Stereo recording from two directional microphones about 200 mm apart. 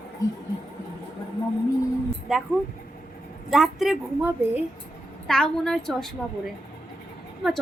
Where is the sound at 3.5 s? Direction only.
Centre (ahead or behind).